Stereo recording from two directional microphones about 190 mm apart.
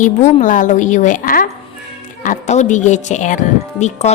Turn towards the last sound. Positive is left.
turn(degrees=40)  # may be behind; listen again after turning